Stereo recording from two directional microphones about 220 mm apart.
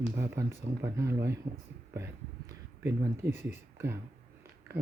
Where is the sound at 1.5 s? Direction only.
30° right (ahead or behind).